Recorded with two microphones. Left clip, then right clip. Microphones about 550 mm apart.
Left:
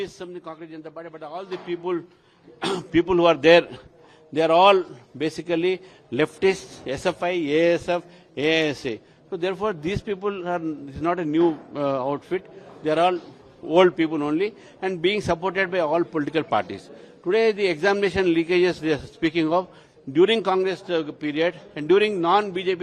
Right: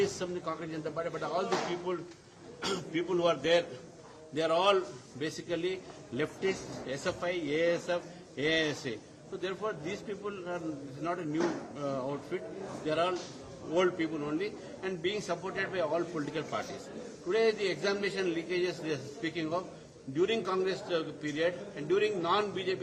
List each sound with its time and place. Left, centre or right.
0.0 s a man's voice: left
4.4 s a man's voice: left